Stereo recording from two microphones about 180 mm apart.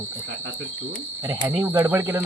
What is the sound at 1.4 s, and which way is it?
Speech, 15° right (ahead or behind).